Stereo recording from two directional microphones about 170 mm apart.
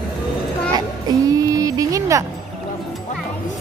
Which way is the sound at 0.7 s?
20° right (ahead or behind).